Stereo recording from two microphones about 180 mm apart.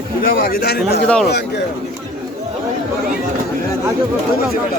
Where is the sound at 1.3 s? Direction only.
70° left (ahead or behind).